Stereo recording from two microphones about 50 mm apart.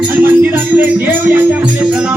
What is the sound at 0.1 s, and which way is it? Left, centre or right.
Music, right.